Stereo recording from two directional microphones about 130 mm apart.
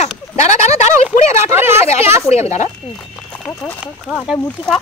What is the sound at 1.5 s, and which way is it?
Speech, 20° right (ahead or behind).